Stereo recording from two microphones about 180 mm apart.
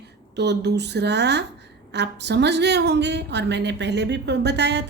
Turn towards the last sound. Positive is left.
turn(degrees=-70)  # may be behind; listen again after turning